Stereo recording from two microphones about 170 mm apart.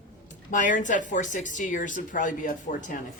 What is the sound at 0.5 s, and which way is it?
Speech, 50° left (ahead or behind).